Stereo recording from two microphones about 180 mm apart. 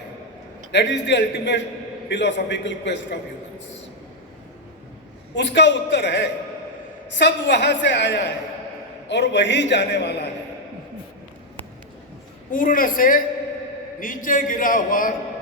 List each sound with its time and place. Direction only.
0.7 s a woman's voice: 75° left (ahead or behind)
5.3 s a woman's voice: 75° left (ahead or behind)
12.5 s a man's voice: 50° left (ahead or behind)